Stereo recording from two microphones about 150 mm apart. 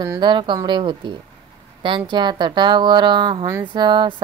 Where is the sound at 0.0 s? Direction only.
30° right (ahead or behind).